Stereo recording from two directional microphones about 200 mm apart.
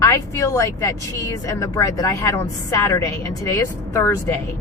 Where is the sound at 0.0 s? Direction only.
15° left (ahead or behind).